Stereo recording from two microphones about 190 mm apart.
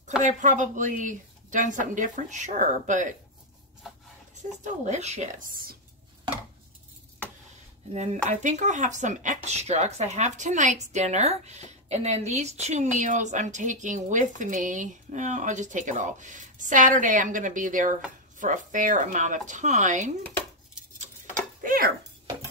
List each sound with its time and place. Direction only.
0.2 s speech: 40° right (ahead or behind)
4.6 s speech: 35° right (ahead or behind)
7.9 s speech: 40° right (ahead or behind)
21.6 s speech: 50° right (ahead or behind)